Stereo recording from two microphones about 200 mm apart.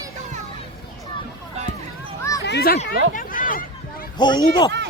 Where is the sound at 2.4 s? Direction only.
55° left (ahead or behind).